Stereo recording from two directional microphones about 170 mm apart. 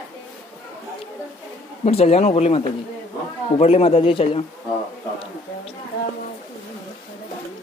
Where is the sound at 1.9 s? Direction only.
40° left (ahead or behind).